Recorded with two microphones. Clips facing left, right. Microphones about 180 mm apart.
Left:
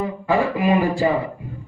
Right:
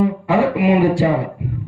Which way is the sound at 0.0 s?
75° right (ahead or behind).